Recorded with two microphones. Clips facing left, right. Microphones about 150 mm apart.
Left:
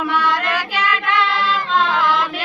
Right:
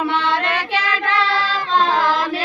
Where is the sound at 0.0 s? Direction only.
25° right (ahead or behind).